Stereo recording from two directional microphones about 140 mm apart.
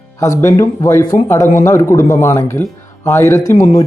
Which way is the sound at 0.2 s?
20° left (ahead or behind).